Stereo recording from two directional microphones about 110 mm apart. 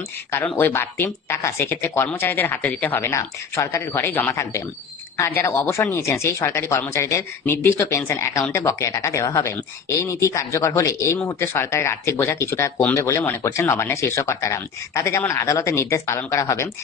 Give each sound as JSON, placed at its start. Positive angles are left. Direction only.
{"t": 0.3, "sound": "speech", "side_deg": 20}